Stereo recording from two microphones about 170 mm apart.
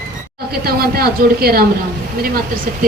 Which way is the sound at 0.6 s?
65° right (ahead or behind).